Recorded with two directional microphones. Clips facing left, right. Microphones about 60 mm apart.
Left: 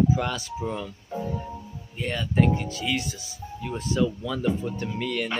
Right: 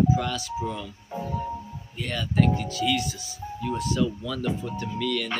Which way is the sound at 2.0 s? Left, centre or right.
Left.